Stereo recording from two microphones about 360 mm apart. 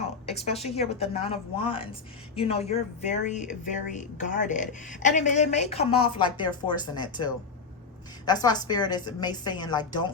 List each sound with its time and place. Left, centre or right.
0.0 s speech: centre